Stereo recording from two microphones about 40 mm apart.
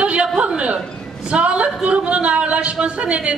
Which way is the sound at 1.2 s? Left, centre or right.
Right.